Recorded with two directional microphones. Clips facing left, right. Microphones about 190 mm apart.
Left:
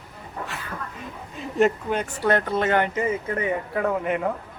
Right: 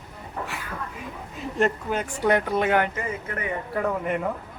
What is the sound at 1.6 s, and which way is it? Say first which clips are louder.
Speech: left 3 dB; 5° right (ahead or behind).